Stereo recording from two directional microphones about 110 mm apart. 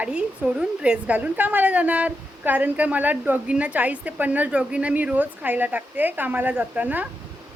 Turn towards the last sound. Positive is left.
turn(degrees=-15)  # may be behind; listen again after turning